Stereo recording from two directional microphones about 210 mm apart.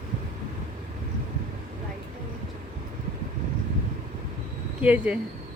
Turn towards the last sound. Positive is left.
turn(degrees=-5)  # may be behind; listen again after turning